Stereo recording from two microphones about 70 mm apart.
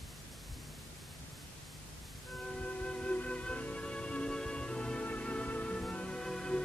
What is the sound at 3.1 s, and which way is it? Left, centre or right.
Music, centre.